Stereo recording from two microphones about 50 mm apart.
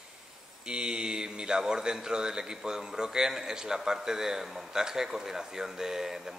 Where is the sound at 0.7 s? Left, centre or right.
Centre.